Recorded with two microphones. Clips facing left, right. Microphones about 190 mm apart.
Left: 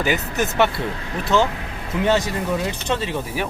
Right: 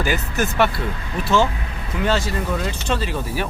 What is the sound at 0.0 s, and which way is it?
Speech, 20° left (ahead or behind).